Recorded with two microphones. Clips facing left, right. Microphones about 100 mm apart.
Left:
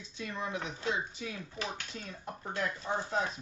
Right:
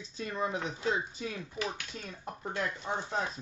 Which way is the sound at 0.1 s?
35° right (ahead or behind).